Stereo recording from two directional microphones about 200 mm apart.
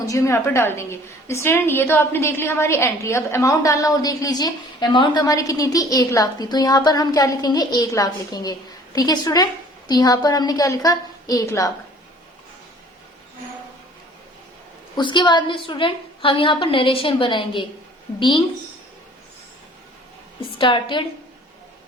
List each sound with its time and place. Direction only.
0.1 s a woman's voice: 15° left (ahead or behind)
14.9 s a woman's voice: 25° left (ahead or behind)
20.6 s a woman's voice: 25° left (ahead or behind)